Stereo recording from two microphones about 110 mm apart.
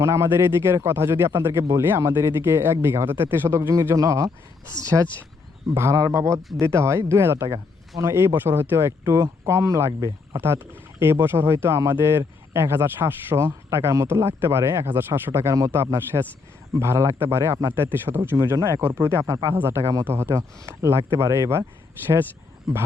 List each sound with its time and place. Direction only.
0.0 s speech: 25° right (ahead or behind)